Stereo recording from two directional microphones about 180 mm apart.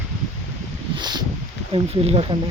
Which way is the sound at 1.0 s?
25° right (ahead or behind).